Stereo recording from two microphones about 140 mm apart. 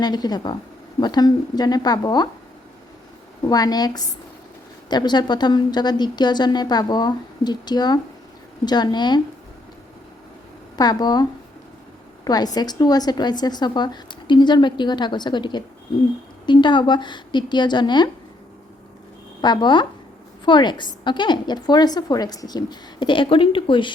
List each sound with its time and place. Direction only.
0.0 s a woman's voice: 30° left (ahead or behind)
3.4 s a woman's voice: 30° left (ahead or behind)
10.8 s a woman's voice: 30° left (ahead or behind)
19.4 s a woman's voice: 30° left (ahead or behind)